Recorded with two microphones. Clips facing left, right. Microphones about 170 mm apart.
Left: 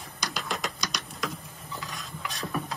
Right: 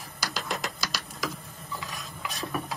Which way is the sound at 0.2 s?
5° right (ahead or behind).